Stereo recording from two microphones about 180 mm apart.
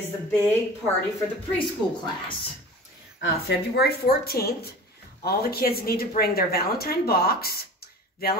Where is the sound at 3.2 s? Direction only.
70° left (ahead or behind).